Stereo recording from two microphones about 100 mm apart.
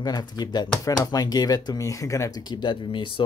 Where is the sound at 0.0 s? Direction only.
40° left (ahead or behind).